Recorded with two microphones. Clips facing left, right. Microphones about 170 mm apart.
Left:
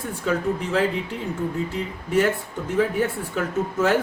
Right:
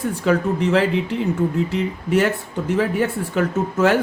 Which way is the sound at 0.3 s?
75° right (ahead or behind).